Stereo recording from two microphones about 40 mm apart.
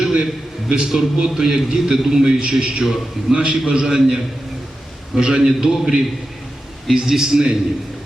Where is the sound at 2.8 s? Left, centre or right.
Centre.